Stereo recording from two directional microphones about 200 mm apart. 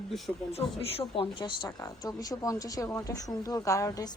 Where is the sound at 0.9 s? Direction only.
25° left (ahead or behind).